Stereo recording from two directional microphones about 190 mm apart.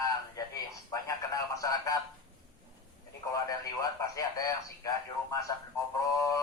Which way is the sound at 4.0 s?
20° left (ahead or behind).